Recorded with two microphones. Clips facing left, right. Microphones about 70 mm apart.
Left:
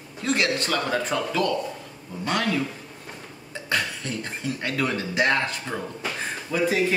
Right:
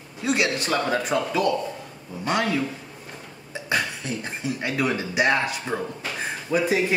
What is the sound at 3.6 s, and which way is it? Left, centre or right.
Speech, centre.